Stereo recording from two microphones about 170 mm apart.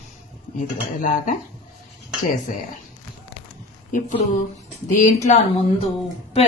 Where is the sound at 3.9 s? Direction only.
50° left (ahead or behind).